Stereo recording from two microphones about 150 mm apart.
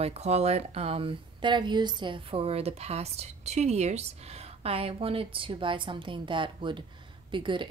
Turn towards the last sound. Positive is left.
turn(degrees=-35)  # may be behind; listen again after turning